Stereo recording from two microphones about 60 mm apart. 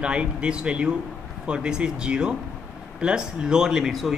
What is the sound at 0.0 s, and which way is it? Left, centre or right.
Speech, centre.